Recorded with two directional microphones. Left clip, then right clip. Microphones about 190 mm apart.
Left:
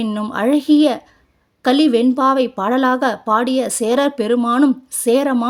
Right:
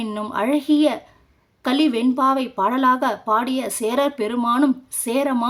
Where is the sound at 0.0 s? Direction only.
25° left (ahead or behind).